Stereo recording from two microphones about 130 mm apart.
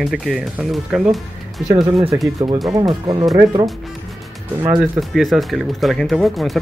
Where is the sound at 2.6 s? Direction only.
30° right (ahead or behind).